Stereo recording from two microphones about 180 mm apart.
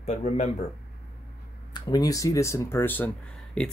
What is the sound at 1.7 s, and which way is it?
Speech, 20° left (ahead or behind).